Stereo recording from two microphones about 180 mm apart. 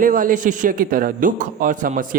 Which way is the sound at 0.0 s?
50° right (ahead or behind).